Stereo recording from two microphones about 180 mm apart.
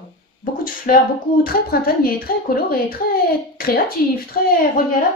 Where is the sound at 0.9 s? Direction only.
50° left (ahead or behind).